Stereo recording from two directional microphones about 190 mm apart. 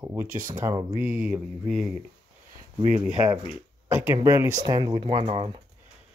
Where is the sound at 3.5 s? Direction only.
10° right (ahead or behind); by 5.6 s 30° right (ahead or behind).